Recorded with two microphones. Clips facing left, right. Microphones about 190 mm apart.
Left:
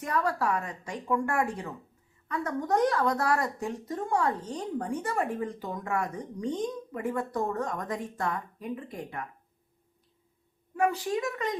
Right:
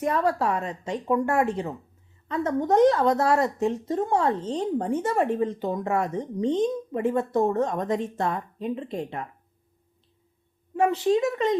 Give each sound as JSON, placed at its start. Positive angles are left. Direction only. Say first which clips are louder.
{"t": 0.0, "sound": "a woman's voice", "louder": "right 5 dB", "side_deg": -25}
{"t": 10.8, "sound": "a woman's voice", "louder": "right 6 dB", "side_deg": -25}